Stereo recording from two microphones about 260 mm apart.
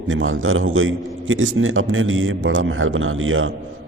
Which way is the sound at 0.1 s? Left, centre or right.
Right.